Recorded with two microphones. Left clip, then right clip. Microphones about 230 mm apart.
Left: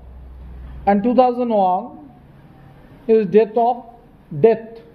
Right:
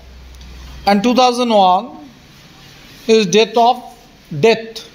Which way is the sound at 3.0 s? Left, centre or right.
Centre.